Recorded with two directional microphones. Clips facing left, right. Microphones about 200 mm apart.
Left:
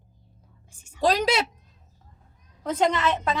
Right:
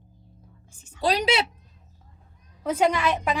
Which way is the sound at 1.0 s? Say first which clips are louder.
Left 2 dB; 45° left (ahead or behind).